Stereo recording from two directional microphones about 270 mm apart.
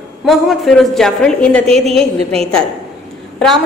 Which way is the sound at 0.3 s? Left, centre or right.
Centre.